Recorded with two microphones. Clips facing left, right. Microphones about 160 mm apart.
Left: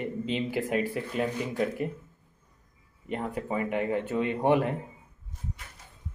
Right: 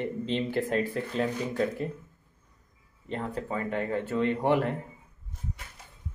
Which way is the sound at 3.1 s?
15° left (ahead or behind).